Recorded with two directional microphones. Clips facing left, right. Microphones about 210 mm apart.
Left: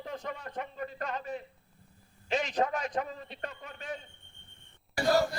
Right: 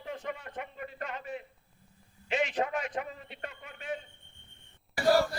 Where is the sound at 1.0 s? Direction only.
40° left (ahead or behind).